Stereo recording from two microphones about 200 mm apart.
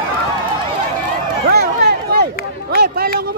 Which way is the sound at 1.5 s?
55° right (ahead or behind).